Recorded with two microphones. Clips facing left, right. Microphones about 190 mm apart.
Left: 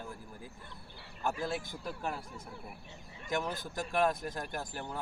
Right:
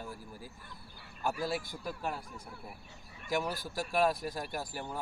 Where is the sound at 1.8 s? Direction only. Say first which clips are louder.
Even; 5° right (ahead or behind).